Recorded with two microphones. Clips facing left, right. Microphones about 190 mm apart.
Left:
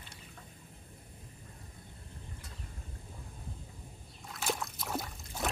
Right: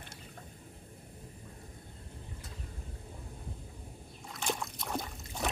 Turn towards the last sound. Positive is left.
turn(degrees=5)  # may be behind; listen again after turning